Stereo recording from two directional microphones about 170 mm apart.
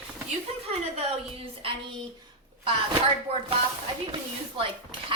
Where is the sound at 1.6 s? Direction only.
35° right (ahead or behind).